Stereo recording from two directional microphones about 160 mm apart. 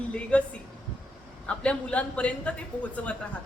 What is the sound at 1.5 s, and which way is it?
A man's voice, 5° left (ahead or behind).